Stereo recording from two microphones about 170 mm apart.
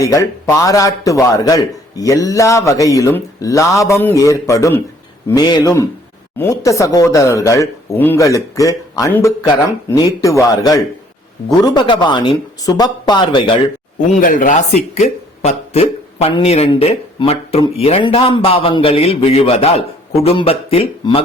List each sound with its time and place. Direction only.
0.0 s a man's voice: 20° left (ahead or behind)
14.2 s speech: 50° left (ahead or behind); by 21.2 s 35° left (ahead or behind)